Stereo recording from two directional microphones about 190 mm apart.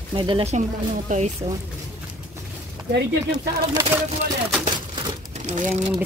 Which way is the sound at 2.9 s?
60° right (ahead or behind).